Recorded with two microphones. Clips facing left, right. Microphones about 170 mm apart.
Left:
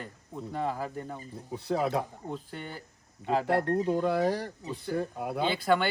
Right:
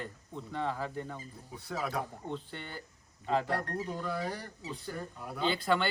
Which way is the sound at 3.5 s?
25° left (ahead or behind).